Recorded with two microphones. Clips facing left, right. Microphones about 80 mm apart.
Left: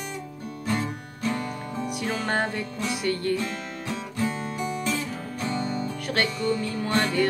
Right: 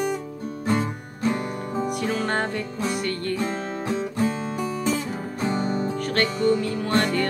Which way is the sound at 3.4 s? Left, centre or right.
Right.